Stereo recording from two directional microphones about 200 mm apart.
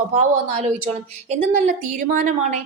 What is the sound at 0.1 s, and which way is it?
A woman's voice, 35° right (ahead or behind).